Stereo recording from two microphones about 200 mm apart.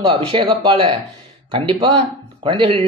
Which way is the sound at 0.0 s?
25° right (ahead or behind).